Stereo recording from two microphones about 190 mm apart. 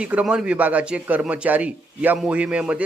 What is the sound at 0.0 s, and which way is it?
Speech, 5° right (ahead or behind).